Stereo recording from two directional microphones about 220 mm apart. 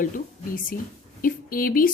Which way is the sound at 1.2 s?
40° left (ahead or behind).